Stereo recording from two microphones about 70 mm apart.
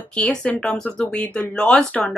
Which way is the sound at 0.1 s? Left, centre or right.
Centre.